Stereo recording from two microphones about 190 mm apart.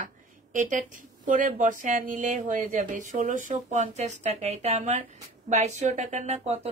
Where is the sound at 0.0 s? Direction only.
45° right (ahead or behind).